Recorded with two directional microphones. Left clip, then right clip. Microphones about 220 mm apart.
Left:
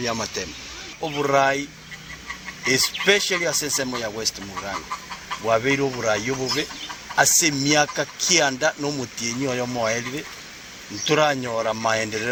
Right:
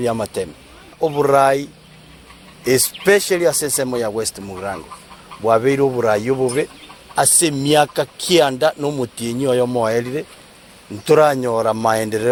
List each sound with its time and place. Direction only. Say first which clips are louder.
0.0 s speech: right 6 dB; 50° right (ahead or behind)
2.6 s speech: right 4 dB; 50° right (ahead or behind)
11.0 s speech: right 7 dB; 50° right (ahead or behind)